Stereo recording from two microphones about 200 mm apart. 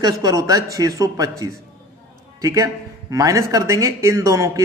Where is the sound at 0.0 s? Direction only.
15° right (ahead or behind).